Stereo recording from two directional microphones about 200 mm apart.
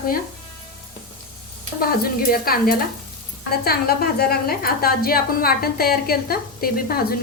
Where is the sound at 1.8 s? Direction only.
50° left (ahead or behind).